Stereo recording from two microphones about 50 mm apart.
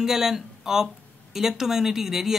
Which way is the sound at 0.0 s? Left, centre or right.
Centre.